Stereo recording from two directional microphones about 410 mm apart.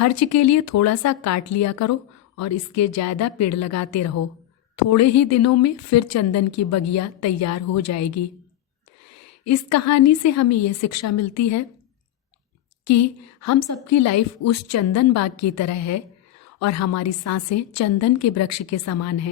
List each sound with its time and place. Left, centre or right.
0.0 s speech: left
9.4 s speech: left
12.8 s a woman's voice: left